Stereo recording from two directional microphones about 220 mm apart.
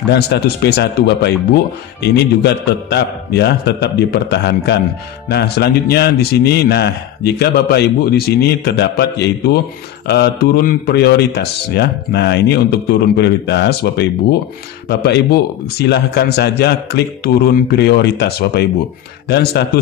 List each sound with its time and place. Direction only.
0.1 s a man's voice: 50° left (ahead or behind)